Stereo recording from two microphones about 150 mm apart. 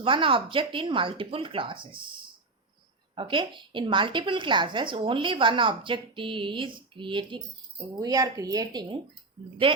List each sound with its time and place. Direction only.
0.0 s a woman's voice: 35° right (ahead or behind)
3.2 s a woman's voice: 35° right (ahead or behind)
9.4 s a woman's voice: 35° right (ahead or behind)